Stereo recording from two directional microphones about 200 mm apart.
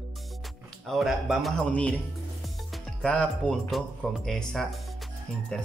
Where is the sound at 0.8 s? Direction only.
Centre (ahead or behind).